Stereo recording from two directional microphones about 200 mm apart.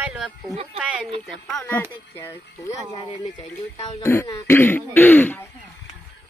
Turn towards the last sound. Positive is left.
turn(degrees=10)  # may be behind; listen again after turning